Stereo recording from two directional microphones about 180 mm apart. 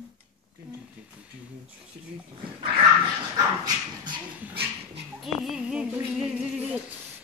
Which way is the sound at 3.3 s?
25° right (ahead or behind).